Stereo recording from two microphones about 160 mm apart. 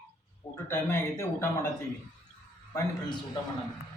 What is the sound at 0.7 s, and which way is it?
Speech, 15° left (ahead or behind).